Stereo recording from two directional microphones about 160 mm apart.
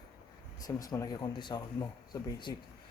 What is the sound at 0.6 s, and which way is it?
Speech, 25° left (ahead or behind).